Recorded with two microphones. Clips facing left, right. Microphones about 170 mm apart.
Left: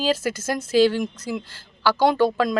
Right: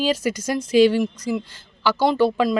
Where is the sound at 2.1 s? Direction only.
5° right (ahead or behind).